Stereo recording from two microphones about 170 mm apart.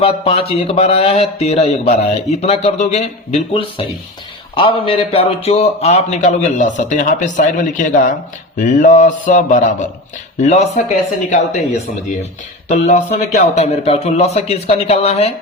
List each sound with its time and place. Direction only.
0.0 s speech: 35° left (ahead or behind)
12.6 s speech: 40° left (ahead or behind)